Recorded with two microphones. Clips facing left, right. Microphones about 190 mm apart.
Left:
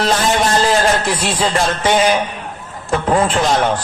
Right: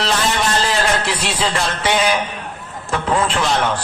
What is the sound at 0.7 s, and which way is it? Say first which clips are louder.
Speech: left 4 dB; 45° left (ahead or behind).